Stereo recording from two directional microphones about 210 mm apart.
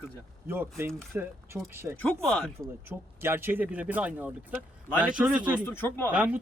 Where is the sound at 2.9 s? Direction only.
10° right (ahead or behind).